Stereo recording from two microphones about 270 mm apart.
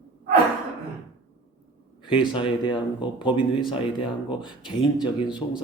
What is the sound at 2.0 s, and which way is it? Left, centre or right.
A man's voice, centre.